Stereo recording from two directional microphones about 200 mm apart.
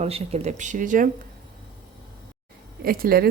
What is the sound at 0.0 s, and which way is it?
Speech, 35° right (ahead or behind).